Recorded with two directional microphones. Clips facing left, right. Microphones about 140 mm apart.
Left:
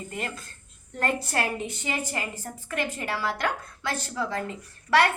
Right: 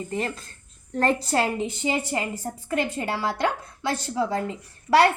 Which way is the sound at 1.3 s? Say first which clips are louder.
Right 5 dB; 25° right (ahead or behind).